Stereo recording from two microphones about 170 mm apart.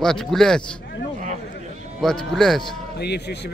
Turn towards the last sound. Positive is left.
turn(degrees=75)  # may be behind; listen again after turning